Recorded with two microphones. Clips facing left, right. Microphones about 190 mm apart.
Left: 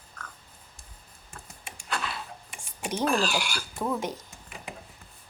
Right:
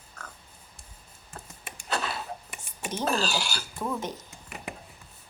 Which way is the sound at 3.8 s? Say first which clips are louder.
Left 2 dB; 10° left (ahead or behind).